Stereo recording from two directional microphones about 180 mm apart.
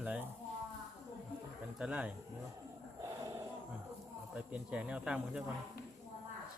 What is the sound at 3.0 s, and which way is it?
Roaring cats, 15° right (ahead or behind).